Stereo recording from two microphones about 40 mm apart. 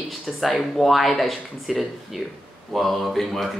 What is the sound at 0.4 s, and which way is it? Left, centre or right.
A man's voice, centre.